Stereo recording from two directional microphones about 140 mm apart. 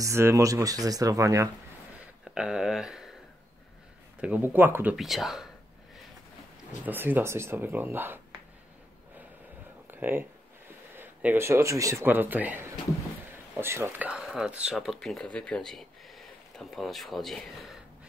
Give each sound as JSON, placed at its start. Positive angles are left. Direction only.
{"t": 0.0, "sound": "speech", "side_deg": -20}
{"t": 2.3, "sound": "speech", "side_deg": -5}
{"t": 4.2, "sound": "speech", "side_deg": -10}
{"t": 4.9, "sound": "speech", "side_deg": 0}
{"t": 6.9, "sound": "speech", "side_deg": -15}
{"t": 9.8, "sound": "a sound", "side_deg": -15}
{"t": 11.0, "sound": "speech", "side_deg": -15}